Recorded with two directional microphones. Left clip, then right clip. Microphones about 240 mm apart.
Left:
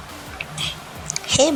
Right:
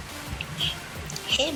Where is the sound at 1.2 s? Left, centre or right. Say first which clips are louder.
Left 8 dB; left.